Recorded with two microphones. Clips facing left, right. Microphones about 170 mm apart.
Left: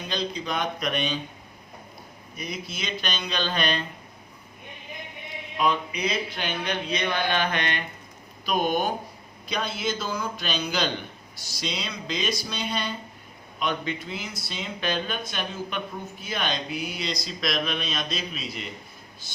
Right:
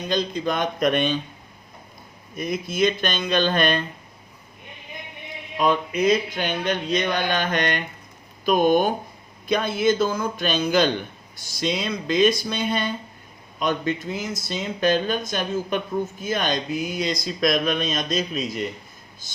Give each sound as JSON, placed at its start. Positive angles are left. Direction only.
{"t": 0.1, "sound": "speech", "side_deg": -50}
{"t": 2.3, "sound": "speech", "side_deg": -50}
{"t": 5.5, "sound": "speech", "side_deg": -50}